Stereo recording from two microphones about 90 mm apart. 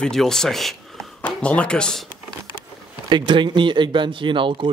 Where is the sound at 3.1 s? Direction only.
60° right (ahead or behind).